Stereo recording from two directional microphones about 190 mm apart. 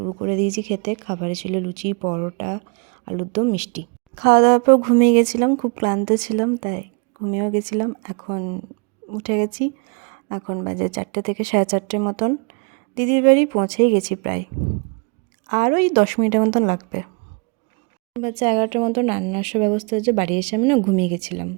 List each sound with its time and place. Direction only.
0.2 s speech: 40° right (ahead or behind)
15.4 s speech: 45° right (ahead or behind)
18.2 s speech: 30° right (ahead or behind)